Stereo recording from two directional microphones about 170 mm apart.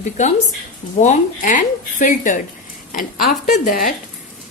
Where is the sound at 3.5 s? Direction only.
55° left (ahead or behind).